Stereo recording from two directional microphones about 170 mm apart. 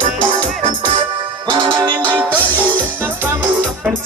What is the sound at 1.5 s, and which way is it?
Music, 25° right (ahead or behind).